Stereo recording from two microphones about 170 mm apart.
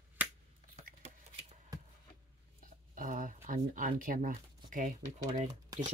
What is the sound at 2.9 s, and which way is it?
Speech, 50° right (ahead or behind).